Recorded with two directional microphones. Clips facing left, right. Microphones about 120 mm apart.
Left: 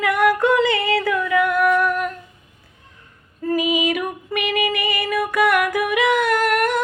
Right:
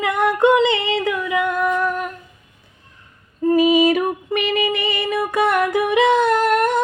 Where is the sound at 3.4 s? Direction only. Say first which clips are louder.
Right 6 dB; 30° right (ahead or behind).